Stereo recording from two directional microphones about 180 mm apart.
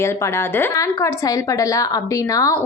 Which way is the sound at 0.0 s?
15° left (ahead or behind).